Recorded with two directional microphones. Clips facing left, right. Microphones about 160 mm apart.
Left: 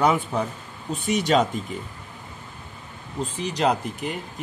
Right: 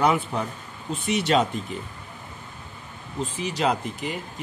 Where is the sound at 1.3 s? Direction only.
Centre (ahead or behind).